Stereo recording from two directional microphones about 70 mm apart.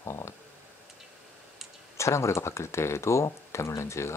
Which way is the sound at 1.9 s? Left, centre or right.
Left.